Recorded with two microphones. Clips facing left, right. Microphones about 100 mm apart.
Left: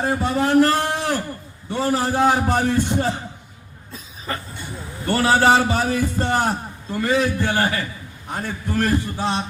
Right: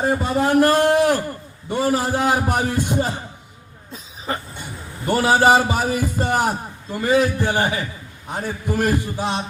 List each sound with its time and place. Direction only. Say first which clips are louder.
0.0 s a man's voice: right 1 dB; 15° right (ahead or behind)
5.0 s a man's voice: right 1 dB; 15° right (ahead or behind)